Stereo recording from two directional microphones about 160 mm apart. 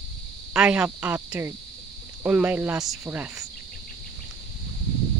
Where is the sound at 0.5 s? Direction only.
5° right (ahead or behind).